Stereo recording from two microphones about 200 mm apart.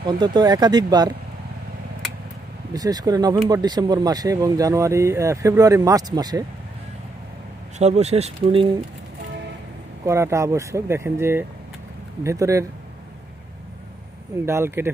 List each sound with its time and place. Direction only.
0.0 s speech: 20° right (ahead or behind)
2.7 s speech: 20° right (ahead or behind)
7.8 s speech: 35° right (ahead or behind)
10.0 s speech: 15° right (ahead or behind)
14.4 s speech: 15° right (ahead or behind)